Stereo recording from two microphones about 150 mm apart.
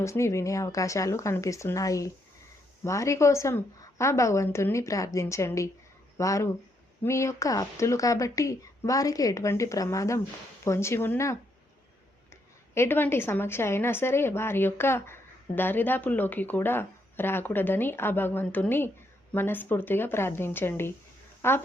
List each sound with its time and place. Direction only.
0.0 s a woman's voice: 20° left (ahead or behind)
12.7 s a woman's voice: 15° left (ahead or behind)